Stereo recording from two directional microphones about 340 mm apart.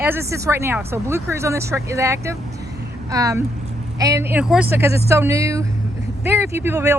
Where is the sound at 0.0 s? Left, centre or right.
Centre.